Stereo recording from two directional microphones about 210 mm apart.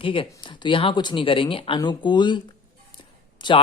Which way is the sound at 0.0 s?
25° left (ahead or behind).